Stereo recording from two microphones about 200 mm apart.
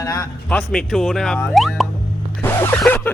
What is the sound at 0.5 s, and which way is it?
Speech, centre (ahead or behind).